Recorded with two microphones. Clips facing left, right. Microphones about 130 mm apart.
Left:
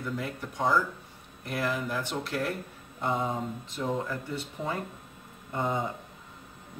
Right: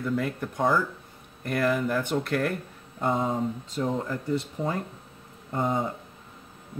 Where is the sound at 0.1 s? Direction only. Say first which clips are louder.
Right 6 dB; 50° right (ahead or behind).